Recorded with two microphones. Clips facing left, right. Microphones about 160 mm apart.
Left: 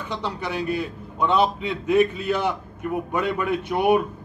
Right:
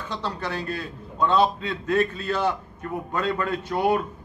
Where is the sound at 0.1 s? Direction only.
15° left (ahead or behind).